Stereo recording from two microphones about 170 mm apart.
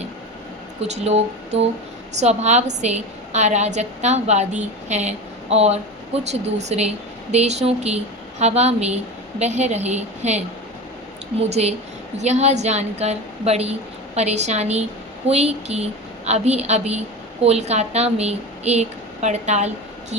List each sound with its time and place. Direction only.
0.9 s a woman's voice: 40° right (ahead or behind)